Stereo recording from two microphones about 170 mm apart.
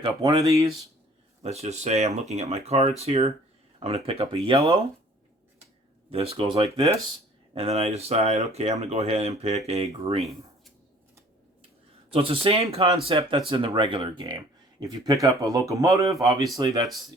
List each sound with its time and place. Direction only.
0.0 s speech: 20° right (ahead or behind)
1.4 s speech: 40° right (ahead or behind)
6.1 s speech: 35° right (ahead or behind)
6.7 s speech: 20° right (ahead or behind)
7.5 s speech: 35° right (ahead or behind)
12.1 s speech: 35° right (ahead or behind)